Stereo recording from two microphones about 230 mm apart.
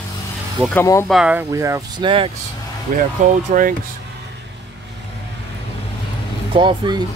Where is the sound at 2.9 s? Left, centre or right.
Right.